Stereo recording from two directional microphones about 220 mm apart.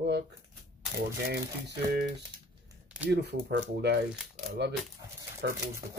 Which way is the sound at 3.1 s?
50° right (ahead or behind).